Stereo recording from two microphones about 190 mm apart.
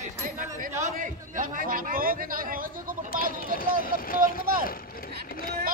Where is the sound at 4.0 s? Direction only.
50° left (ahead or behind).